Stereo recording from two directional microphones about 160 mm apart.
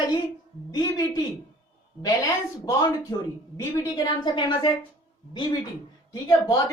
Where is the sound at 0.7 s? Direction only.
25° left (ahead or behind).